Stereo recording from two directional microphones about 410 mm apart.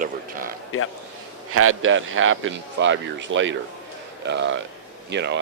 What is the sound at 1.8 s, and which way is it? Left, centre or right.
Speech, right.